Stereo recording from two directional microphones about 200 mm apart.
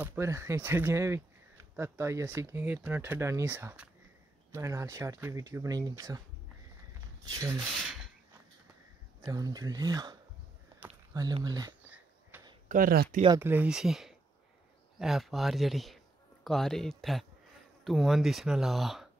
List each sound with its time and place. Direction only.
0.0 s speech: 10° right (ahead or behind)
7.2 s speech: 20° right (ahead or behind)
9.2 s speech: 15° right (ahead or behind)
11.1 s speech: 20° right (ahead or behind)
12.3 s a sound: 10° right (ahead or behind)
12.6 s speech: 45° right (ahead or behind)
13.4 s speech: 10° right (ahead or behind)